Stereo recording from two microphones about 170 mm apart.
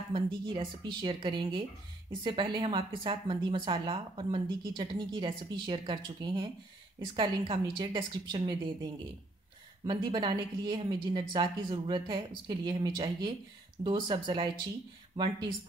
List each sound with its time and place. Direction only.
0.1 s a woman's voice: 30° right (ahead or behind)